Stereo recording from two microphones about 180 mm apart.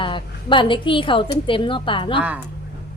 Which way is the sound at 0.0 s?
25° left (ahead or behind).